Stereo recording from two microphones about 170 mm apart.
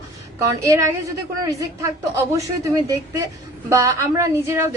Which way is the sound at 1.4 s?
20° right (ahead or behind).